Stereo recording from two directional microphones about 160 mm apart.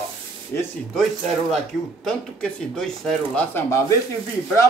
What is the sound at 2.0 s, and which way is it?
Speech, 5° left (ahead or behind).